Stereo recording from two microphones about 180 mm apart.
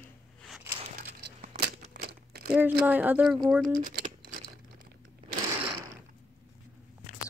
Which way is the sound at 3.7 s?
50° right (ahead or behind).